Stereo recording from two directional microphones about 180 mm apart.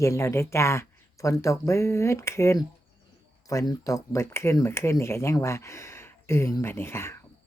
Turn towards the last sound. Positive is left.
turn(degrees=15)  # may be behind; listen again after turning